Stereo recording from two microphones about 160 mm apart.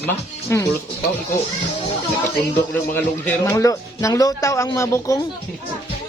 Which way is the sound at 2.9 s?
10° left (ahead or behind).